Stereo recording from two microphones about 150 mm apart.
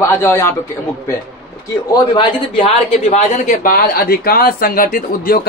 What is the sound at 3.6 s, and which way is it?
Speech, 75° left (ahead or behind).